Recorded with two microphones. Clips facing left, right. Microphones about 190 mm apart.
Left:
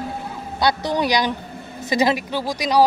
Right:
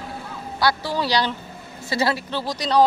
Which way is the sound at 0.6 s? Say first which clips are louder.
Left 2 dB; 20° left (ahead or behind).